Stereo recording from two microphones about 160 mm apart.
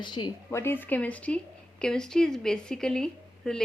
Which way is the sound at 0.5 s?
15° left (ahead or behind).